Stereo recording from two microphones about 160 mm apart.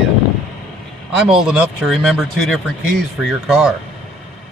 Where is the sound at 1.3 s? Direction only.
5° right (ahead or behind).